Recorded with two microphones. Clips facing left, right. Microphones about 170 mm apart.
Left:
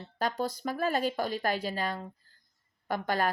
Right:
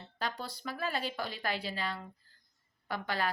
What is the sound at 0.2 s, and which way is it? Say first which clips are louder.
Speech: left 8 dB; 45° left (ahead or behind).